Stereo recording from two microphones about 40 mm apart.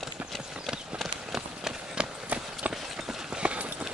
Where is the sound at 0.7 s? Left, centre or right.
Centre.